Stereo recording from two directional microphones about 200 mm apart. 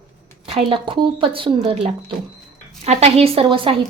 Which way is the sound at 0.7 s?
25° right (ahead or behind).